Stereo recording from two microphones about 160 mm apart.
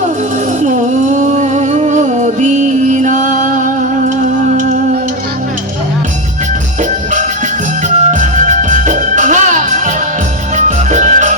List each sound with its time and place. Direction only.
0.6 s music: 55° right (ahead or behind)
7.9 s music: 50° right (ahead or behind)